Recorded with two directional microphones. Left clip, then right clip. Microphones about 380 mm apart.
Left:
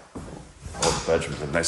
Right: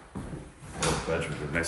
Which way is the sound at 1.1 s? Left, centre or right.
Centre.